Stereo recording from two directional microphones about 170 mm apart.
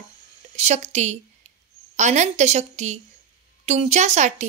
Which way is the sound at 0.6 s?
40° right (ahead or behind).